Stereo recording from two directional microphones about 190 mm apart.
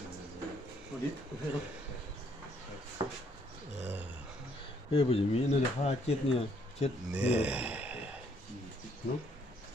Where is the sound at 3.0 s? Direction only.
25° right (ahead or behind).